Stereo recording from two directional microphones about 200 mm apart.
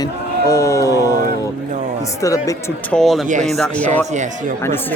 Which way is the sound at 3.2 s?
40° right (ahead or behind).